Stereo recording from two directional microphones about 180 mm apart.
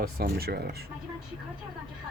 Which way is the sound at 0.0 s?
55° right (ahead or behind).